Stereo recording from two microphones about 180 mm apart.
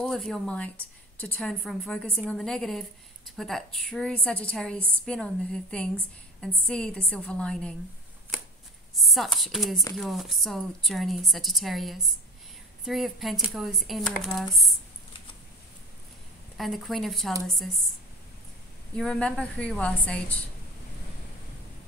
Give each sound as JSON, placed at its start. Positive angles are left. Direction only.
{"t": 0.0, "sound": "a woman's voice", "side_deg": 0}
{"t": 8.9, "sound": "a woman's voice", "side_deg": 0}
{"t": 16.5, "sound": "a woman's voice", "side_deg": 0}
{"t": 18.9, "sound": "a woman's voice", "side_deg": 5}